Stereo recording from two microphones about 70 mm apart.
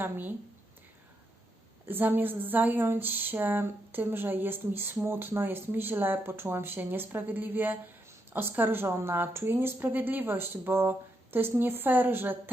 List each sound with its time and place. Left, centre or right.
0.0 s speech: right
1.9 s speech: right